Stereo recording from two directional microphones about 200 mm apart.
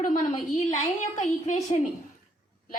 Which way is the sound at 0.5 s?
35° left (ahead or behind).